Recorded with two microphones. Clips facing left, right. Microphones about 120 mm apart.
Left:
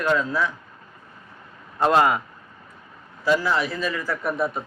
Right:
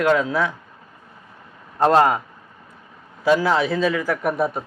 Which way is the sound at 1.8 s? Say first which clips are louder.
Right 3 dB; 40° right (ahead or behind).